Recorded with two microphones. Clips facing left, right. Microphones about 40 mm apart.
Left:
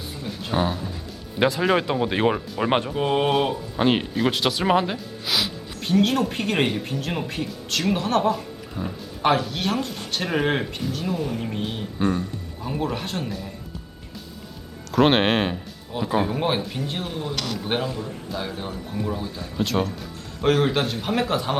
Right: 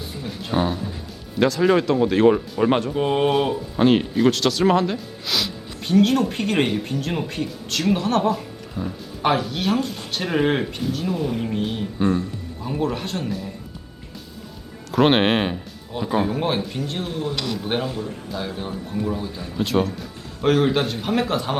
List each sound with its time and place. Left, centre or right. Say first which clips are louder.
0.2 s speech: right 1 dB; centre
1.4 s speech: right 3 dB; left
2.9 s speech: right 2 dB; centre
4.3 s speech: right 2 dB; centre
14.9 s speech: right 1 dB; centre